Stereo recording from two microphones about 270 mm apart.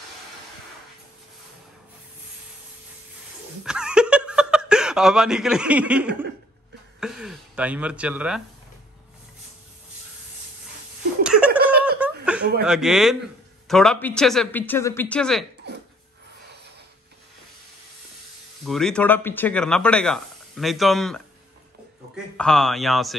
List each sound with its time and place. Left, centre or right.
3.6 s a sound: centre
7.0 s speech: centre
11.2 s giggle: centre
12.0 s laughter: centre
12.6 s speech: centre
18.6 s speech: centre